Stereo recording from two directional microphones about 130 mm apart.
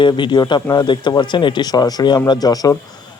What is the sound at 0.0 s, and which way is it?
Speech, 35° left (ahead or behind).